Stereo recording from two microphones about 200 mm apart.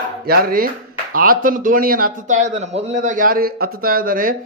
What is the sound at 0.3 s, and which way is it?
A man's voice, 50° right (ahead or behind).